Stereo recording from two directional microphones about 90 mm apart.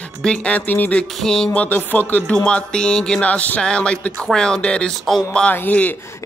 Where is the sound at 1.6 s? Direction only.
20° left (ahead or behind).